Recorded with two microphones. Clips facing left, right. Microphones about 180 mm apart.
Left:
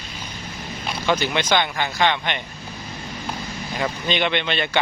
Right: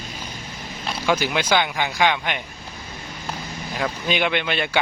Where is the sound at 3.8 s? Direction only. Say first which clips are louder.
Even; 5° right (ahead or behind).